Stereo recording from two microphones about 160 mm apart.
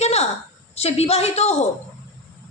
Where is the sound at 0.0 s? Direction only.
40° left (ahead or behind).